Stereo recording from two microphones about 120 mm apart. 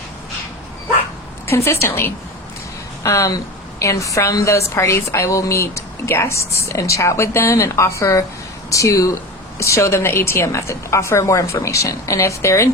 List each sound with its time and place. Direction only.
1.5 s a woman's voice: 20° left (ahead or behind)